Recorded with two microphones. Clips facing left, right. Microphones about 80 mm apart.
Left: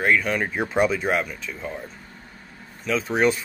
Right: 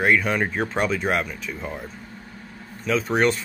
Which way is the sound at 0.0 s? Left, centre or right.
Centre.